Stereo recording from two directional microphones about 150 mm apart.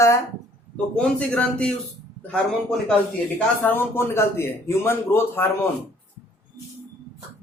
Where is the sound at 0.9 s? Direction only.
5° left (ahead or behind).